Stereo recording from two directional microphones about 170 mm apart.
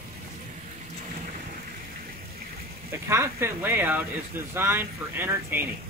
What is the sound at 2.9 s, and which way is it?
Speech, 15° right (ahead or behind).